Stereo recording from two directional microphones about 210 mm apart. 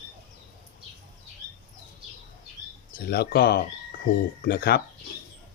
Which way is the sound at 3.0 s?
50° left (ahead or behind).